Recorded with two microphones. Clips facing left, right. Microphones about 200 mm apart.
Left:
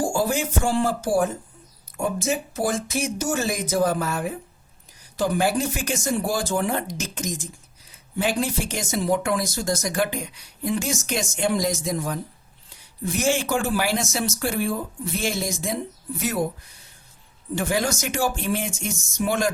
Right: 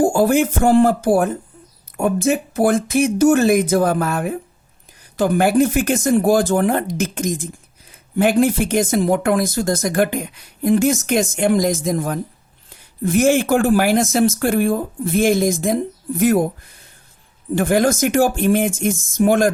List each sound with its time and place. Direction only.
0.0 s speech: 55° right (ahead or behind)
17.5 s speech: 55° right (ahead or behind)